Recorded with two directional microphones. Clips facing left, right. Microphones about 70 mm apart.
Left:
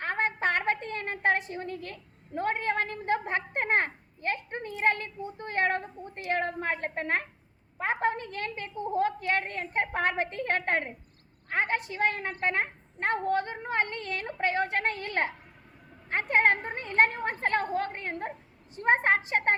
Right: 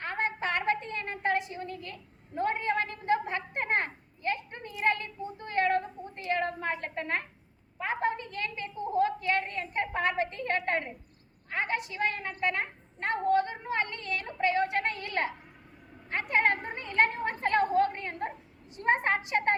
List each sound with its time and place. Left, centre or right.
0.0 s a woman's voice: left
16.3 s a woman's voice: left